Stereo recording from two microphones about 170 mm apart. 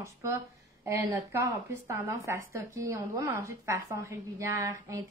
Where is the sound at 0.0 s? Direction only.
15° right (ahead or behind).